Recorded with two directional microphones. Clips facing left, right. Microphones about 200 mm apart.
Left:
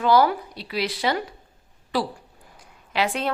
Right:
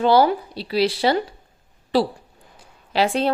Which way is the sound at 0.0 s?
30° right (ahead or behind).